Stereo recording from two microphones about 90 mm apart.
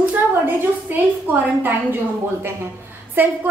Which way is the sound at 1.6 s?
20° right (ahead or behind).